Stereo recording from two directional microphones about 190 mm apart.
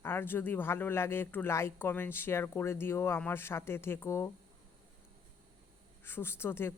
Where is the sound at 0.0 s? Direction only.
10° left (ahead or behind).